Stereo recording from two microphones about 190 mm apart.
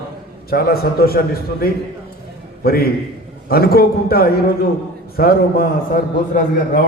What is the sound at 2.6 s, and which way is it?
A man's voice, 55° left (ahead or behind).